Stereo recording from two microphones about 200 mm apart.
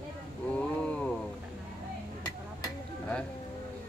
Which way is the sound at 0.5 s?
5° left (ahead or behind).